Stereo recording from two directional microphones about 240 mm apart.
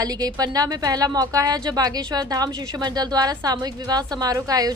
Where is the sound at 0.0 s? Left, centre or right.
Centre.